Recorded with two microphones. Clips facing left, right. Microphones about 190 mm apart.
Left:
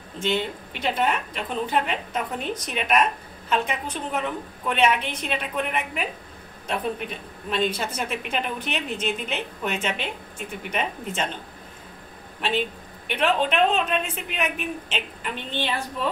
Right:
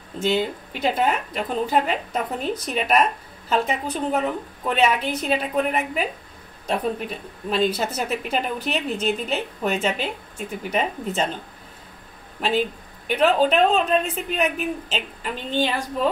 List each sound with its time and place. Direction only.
0.2 s a woman's voice: 40° right (ahead or behind)
13.0 s a woman's voice: 40° right (ahead or behind)